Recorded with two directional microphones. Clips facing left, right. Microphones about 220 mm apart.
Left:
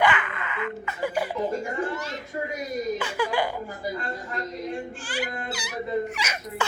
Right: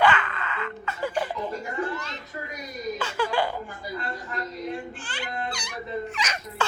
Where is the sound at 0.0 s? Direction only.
15° left (ahead or behind).